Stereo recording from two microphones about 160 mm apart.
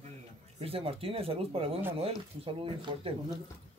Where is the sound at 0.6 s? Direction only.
35° right (ahead or behind).